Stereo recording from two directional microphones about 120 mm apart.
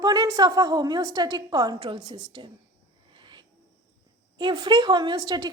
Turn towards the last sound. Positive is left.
turn(degrees=-35)  # may be behind; listen again after turning